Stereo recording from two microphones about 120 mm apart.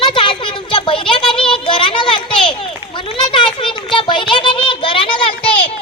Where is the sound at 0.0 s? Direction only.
45° left (ahead or behind).